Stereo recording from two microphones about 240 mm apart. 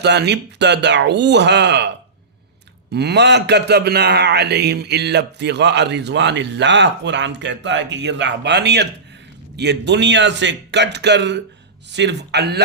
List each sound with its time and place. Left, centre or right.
0.0 s speech: right
2.9 s speech: right